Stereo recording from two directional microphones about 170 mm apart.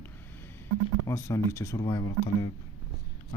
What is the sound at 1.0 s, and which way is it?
Speech, 20° left (ahead or behind).